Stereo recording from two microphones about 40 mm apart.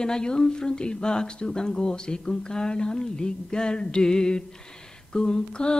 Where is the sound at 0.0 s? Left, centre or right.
Centre.